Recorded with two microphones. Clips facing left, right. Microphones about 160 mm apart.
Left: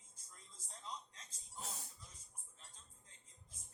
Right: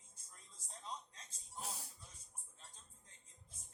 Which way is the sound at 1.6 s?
10° right (ahead or behind).